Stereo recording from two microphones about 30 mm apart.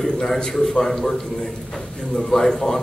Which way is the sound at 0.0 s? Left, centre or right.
Centre.